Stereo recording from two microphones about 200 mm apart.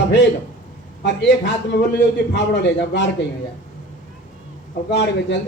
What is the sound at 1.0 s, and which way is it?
A man's voice, 60° left (ahead or behind).